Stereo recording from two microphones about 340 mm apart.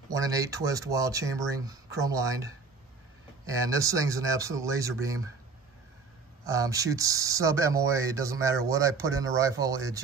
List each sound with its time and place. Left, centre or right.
0.1 s speech: centre
3.4 s speech: centre
6.4 s speech: centre